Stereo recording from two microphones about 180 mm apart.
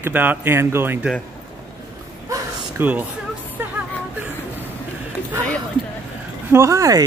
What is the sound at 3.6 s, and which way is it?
Music, 10° right (ahead or behind).